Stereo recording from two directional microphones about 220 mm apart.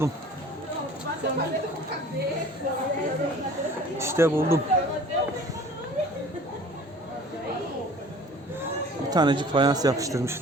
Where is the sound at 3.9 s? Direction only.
10° right (ahead or behind).